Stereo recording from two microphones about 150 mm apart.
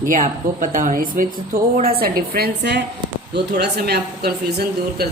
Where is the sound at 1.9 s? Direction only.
85° right.